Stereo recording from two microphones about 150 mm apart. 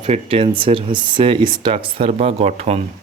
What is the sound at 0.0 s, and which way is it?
Speech, 40° right (ahead or behind).